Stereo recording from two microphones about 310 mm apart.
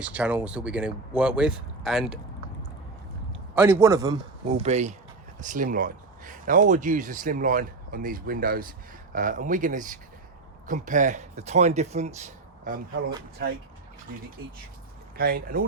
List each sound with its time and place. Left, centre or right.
0.0 s speech: centre
3.5 s a man's voice: centre
15.2 s speech: right